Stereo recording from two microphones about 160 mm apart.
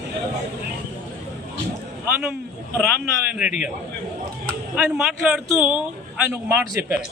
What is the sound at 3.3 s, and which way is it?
A man's voice, 10° right (ahead or behind).